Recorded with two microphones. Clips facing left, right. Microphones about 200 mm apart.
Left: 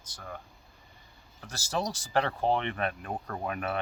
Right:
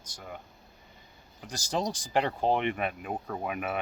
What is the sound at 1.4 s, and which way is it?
Speech, 15° right (ahead or behind).